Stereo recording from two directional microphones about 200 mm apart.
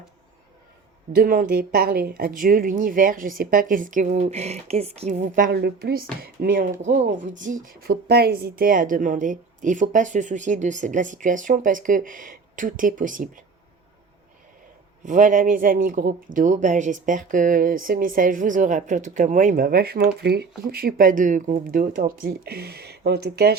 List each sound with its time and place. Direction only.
1.1 s speech: 50° right (ahead or behind)
15.0 s speech: 40° right (ahead or behind)